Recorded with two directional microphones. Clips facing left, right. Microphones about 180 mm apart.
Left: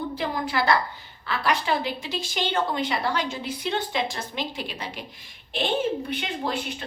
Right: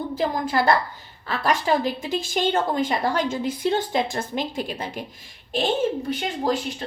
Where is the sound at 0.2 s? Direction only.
45° right (ahead or behind).